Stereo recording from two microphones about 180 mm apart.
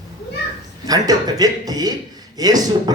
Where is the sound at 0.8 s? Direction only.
20° right (ahead or behind).